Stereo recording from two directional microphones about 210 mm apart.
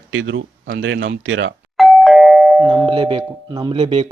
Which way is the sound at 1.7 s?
Centre (ahead or behind).